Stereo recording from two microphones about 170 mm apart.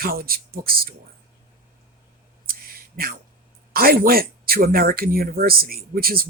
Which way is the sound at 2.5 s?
60° right (ahead or behind).